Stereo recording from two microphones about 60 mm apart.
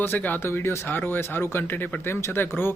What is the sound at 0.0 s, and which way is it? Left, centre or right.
Speech, left.